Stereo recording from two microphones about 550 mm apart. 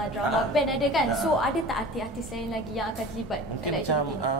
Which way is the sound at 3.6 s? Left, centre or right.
Left.